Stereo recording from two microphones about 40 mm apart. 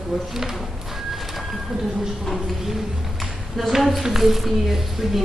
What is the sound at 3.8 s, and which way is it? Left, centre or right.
A woman's voice, centre.